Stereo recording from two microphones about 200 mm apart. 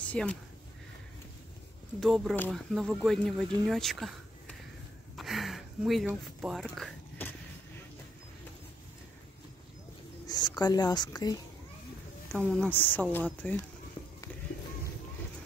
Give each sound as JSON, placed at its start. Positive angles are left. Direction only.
{"t": 0.0, "sound": "speech", "side_deg": 5}
{"t": 2.0, "sound": "speech", "side_deg": 0}
{"t": 5.1, "sound": "a sound", "side_deg": 0}
{"t": 10.2, "sound": "speech", "side_deg": 20}
{"t": 12.3, "sound": "speech", "side_deg": 5}